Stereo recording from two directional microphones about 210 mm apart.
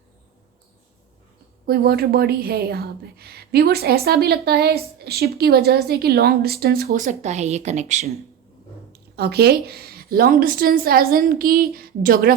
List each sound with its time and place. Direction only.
1.6 s a woman's voice: 45° right (ahead or behind)
9.1 s a woman's voice: 50° right (ahead or behind)